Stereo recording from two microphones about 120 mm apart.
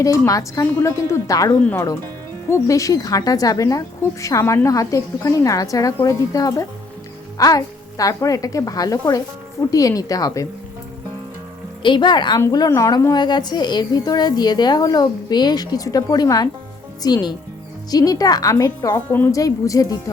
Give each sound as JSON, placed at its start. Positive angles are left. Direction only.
{"t": 0.0, "sound": "a woman's voice", "side_deg": 30}
{"t": 11.8, "sound": "a woman's voice", "side_deg": 40}
{"t": 18.9, "sound": "a woman's voice", "side_deg": 20}
{"t": 19.4, "sound": "a woman's voice", "side_deg": 30}